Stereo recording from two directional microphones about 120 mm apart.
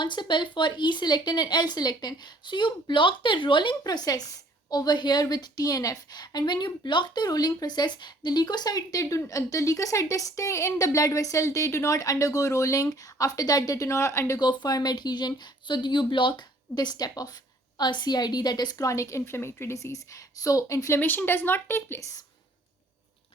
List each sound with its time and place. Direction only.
0.0 s a woman's voice: 40° left (ahead or behind); by 22.0 s 20° left (ahead or behind)